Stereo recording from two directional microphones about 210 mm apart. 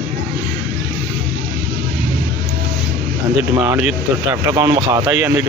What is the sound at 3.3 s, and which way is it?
Speech, 5° right (ahead or behind).